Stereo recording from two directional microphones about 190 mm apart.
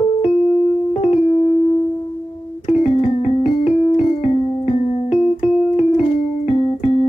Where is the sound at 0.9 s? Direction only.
35° left (ahead or behind).